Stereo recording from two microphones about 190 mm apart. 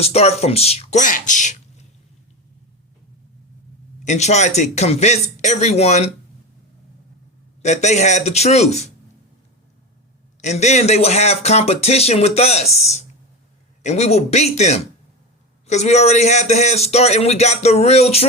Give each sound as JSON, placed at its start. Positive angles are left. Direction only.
{"t": 0.0, "sound": "speech", "side_deg": 35}
{"t": 4.0, "sound": "speech", "side_deg": 40}
{"t": 7.6, "sound": "speech", "side_deg": 35}
{"t": 10.4, "sound": "speech", "side_deg": 35}